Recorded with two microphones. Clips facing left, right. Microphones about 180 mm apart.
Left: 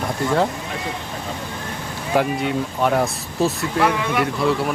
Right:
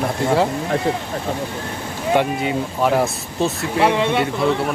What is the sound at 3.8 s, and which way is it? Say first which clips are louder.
Speech: right 3 dB; 25° right (ahead or behind).